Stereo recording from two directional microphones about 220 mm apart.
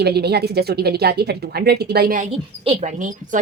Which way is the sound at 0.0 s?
45° right (ahead or behind).